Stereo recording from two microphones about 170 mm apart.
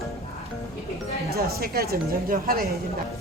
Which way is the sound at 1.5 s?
65° right (ahead or behind).